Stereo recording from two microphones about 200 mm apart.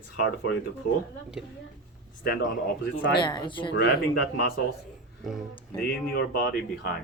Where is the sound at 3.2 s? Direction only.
25° left (ahead or behind).